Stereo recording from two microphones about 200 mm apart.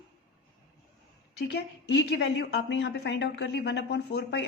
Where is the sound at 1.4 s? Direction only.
55° left (ahead or behind).